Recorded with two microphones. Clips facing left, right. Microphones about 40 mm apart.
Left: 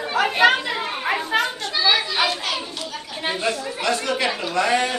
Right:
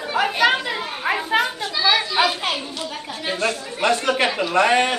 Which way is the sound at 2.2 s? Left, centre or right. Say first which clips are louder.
Right 2 dB; centre.